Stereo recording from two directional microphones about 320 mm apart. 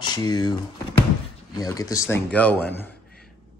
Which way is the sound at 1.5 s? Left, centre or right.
Centre.